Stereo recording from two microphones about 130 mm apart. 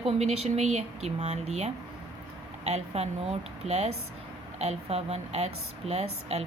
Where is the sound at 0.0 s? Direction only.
55° right (ahead or behind).